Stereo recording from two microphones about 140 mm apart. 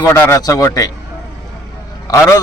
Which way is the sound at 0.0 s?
20° left (ahead or behind).